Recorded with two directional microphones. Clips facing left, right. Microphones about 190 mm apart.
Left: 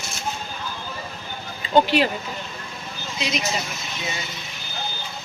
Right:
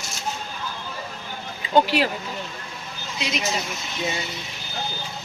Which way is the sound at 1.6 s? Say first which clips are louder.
Left 1 dB; 10° right (ahead or behind).